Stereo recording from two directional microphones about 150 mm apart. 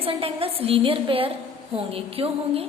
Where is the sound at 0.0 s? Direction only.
40° right (ahead or behind).